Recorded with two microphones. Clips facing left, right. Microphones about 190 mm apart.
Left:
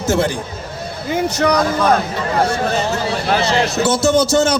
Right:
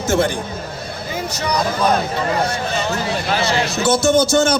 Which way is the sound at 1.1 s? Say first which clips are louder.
Left 8 dB; 60° left (ahead or behind).